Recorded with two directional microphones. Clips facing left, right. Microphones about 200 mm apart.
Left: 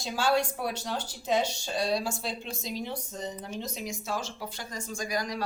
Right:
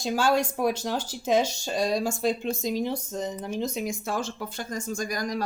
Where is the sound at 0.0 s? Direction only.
45° right (ahead or behind).